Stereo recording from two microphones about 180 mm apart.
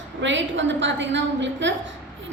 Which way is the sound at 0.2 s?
90° right.